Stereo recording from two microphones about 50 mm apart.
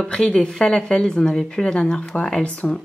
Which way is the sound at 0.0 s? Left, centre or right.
Centre.